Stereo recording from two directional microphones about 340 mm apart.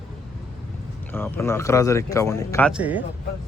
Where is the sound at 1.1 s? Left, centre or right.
Centre.